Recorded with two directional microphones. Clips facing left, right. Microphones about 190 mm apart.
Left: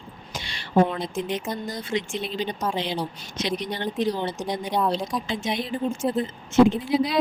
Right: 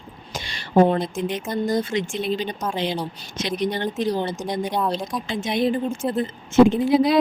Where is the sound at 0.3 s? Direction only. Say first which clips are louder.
Right 3 dB; 45° right (ahead or behind).